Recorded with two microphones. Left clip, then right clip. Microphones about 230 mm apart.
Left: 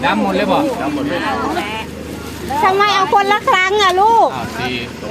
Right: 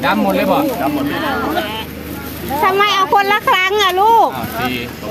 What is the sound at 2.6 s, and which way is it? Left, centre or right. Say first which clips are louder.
Speech: even; right.